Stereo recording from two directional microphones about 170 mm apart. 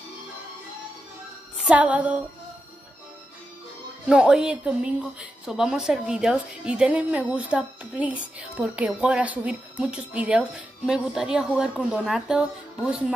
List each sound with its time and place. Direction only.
1.7 s music: 10° right (ahead or behind)
4.1 s a woman's voice: 5° right (ahead or behind)